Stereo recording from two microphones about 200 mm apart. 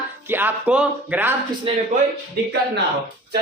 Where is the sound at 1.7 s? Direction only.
30° right (ahead or behind).